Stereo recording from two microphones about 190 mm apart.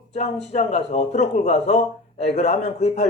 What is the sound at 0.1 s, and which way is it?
Speech, 35° left (ahead or behind).